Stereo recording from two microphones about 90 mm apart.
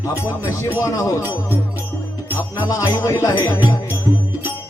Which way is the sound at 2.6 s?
45° left (ahead or behind).